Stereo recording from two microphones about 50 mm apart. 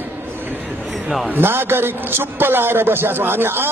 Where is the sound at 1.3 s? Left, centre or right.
Right.